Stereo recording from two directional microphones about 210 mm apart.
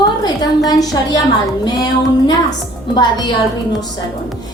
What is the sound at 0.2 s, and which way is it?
A woman's voice, 20° left (ahead or behind).